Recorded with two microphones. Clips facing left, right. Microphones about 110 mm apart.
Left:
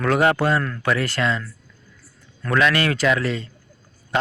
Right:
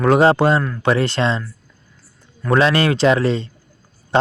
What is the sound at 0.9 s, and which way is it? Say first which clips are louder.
Speech: right 5 dB; 25° right (ahead or behind).